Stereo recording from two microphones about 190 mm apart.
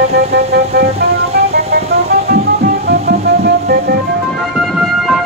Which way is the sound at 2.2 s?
55° right (ahead or behind).